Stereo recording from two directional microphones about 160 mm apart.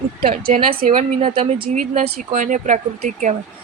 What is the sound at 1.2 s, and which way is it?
Speech, 30° right (ahead or behind).